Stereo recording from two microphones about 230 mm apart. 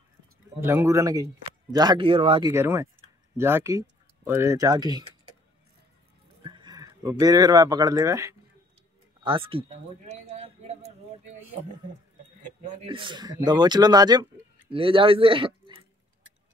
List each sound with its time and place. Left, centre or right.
0.6 s a man's voice: centre
2.5 s a man's voice: centre
6.4 s speech: centre
12.6 s a man's voice: right